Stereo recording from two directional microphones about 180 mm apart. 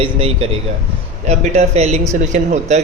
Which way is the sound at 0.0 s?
30° right (ahead or behind).